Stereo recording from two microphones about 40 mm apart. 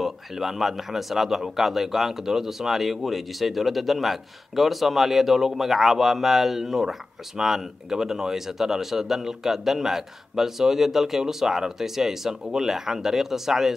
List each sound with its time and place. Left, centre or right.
0.0 s speech: centre